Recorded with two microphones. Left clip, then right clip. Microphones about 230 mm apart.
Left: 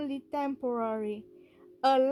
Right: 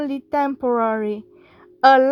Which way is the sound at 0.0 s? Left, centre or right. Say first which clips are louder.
Right 12 dB; right.